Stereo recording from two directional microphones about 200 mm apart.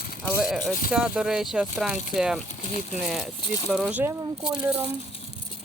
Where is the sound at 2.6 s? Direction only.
35° left (ahead or behind).